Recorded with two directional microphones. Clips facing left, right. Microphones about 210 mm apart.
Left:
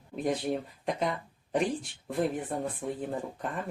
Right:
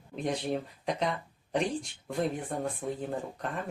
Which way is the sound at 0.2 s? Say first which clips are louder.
Left 2 dB; centre (ahead or behind).